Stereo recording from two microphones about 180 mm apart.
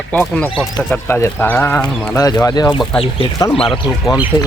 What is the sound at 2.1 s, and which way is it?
Speech, 20° left (ahead or behind).